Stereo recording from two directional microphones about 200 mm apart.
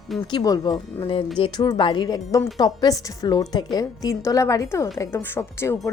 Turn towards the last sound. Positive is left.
turn(degrees=10)  # may be behind; listen again after turning